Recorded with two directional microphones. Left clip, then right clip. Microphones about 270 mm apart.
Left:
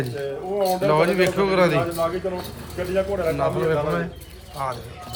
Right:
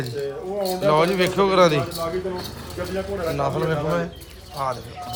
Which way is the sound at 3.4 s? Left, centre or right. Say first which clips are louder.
Even; centre.